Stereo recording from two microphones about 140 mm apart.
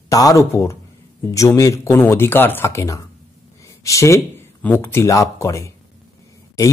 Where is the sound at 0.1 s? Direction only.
25° left (ahead or behind).